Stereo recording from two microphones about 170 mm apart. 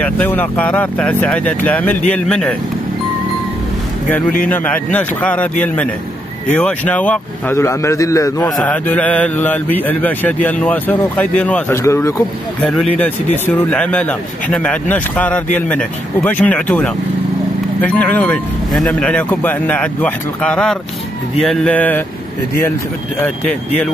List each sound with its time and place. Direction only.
0.0 s speech: 10° left (ahead or behind)
4.5 s speech: 10° left (ahead or behind)
8.5 s speech: 10° left (ahead or behind)
12.6 s speech: 5° left (ahead or behind)